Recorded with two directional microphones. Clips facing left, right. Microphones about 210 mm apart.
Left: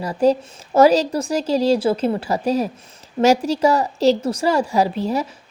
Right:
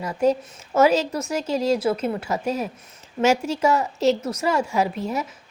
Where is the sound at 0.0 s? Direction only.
35° left (ahead or behind).